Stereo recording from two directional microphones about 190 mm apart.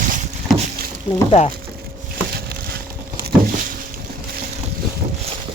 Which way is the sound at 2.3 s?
55° right (ahead or behind).